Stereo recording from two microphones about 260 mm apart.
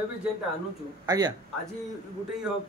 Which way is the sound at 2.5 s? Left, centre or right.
Centre.